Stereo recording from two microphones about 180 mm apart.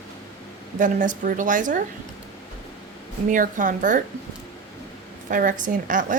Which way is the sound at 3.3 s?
50° right (ahead or behind).